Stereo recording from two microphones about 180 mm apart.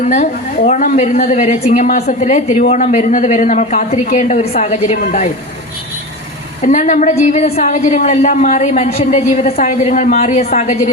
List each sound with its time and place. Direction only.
0.0 s a woman's voice: 40° left (ahead or behind)
6.6 s a woman's voice: 40° left (ahead or behind)